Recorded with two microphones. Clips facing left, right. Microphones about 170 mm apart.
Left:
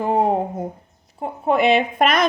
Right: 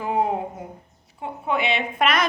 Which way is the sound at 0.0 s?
35° left (ahead or behind).